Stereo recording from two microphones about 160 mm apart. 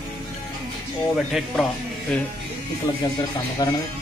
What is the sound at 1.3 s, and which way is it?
Speech, centre (ahead or behind).